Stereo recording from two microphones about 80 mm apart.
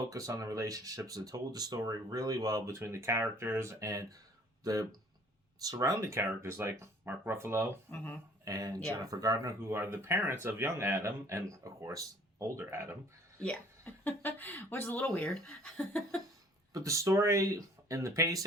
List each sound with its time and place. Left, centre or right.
0.1 s speech: right
7.9 s speech: left
8.4 s speech: right
9.6 s speech: right
13.4 s speech: centre
16.7 s speech: right